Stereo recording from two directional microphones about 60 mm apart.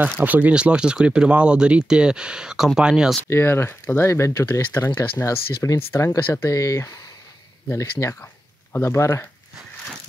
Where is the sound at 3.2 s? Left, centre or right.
Left.